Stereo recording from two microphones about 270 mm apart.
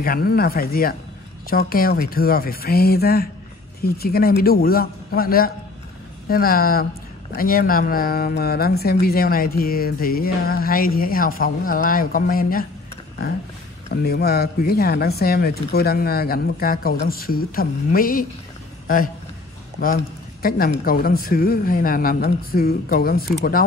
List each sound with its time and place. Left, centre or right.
0.0 s speech: left
20.4 s speech: left